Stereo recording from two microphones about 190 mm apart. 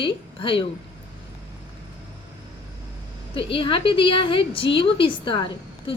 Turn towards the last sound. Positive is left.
turn(degrees=25)  # may be behind; listen again after turning